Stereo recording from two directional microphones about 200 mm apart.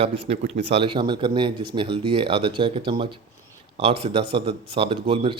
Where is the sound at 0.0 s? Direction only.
30° right (ahead or behind).